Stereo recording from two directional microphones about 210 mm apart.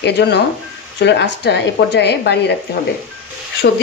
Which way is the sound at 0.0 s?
55° left (ahead or behind).